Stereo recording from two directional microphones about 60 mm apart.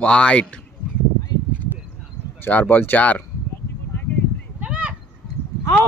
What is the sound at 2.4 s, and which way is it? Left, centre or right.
Speech, left.